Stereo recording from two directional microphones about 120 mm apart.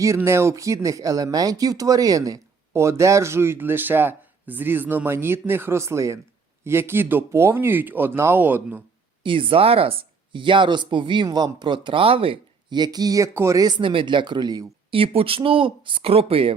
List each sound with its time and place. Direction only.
0.2 s speech: 20° right (ahead or behind)
9.2 s speech: 45° right (ahead or behind)
14.8 s speech: 50° right (ahead or behind)